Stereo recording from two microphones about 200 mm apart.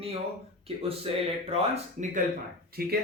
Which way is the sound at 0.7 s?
30° right (ahead or behind).